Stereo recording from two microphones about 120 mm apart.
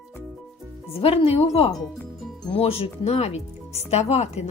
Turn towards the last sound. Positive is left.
turn(degrees=65)  # may be behind; listen again after turning